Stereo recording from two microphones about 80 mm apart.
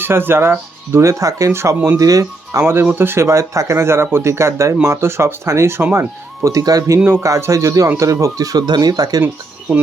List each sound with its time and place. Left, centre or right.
0.0 s speech: right
0.9 s speech: right
2.9 s speech: right
6.4 s speech: right
9.2 s speech: right